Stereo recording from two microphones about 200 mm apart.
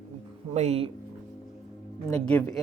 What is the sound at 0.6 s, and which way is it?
Speech, 30° right (ahead or behind).